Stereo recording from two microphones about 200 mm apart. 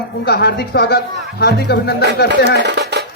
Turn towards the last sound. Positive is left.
turn(degrees=-55)  # may be behind; listen again after turning